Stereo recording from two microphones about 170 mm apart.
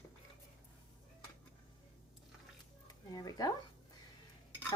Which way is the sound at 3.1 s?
20° left (ahead or behind).